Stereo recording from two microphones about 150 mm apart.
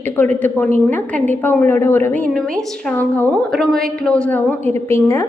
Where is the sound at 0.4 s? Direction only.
15° left (ahead or behind).